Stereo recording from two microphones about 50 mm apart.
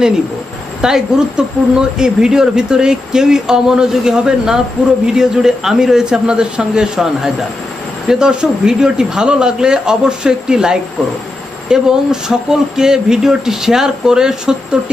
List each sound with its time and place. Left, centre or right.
0.8 s speech: centre